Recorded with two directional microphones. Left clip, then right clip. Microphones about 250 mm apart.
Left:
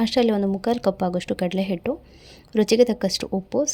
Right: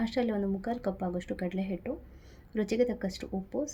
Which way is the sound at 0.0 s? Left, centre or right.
Left.